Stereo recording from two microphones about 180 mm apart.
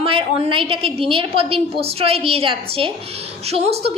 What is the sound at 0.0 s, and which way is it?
A woman's voice, 30° right (ahead or behind).